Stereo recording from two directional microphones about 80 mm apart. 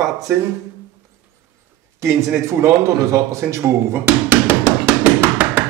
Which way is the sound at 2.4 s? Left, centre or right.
Right.